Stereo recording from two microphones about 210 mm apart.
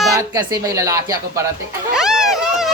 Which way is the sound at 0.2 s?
15° right (ahead or behind).